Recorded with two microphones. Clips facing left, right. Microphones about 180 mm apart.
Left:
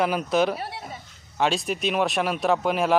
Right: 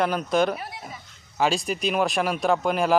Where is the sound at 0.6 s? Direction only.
30° left (ahead or behind).